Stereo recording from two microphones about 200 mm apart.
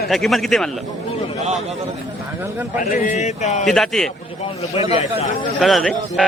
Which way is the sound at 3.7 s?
Centre (ahead or behind).